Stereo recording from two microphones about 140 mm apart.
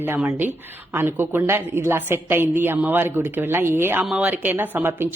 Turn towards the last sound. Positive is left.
turn(degrees=-15)  # may be behind; listen again after turning